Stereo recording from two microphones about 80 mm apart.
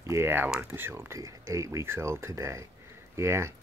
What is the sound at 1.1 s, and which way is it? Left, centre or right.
Speech, right.